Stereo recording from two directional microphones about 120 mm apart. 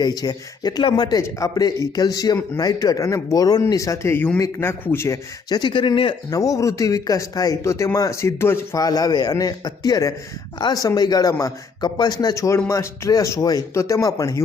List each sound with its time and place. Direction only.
0.0 s a man's voice: 35° left (ahead or behind)
6.3 s speech: 30° left (ahead or behind)
8.8 s a man's voice: 30° left (ahead or behind)